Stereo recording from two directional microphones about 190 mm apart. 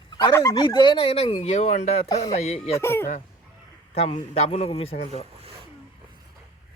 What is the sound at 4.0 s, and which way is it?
Speech, 30° left (ahead or behind).